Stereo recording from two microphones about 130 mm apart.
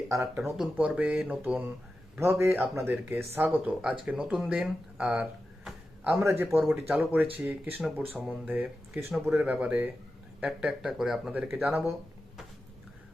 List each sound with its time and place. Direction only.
0.3 s speech: 5° right (ahead or behind)
2.1 s a man's voice: 20° right (ahead or behind)